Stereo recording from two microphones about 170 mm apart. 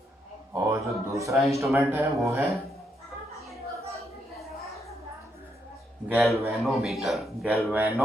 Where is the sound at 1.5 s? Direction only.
20° right (ahead or behind).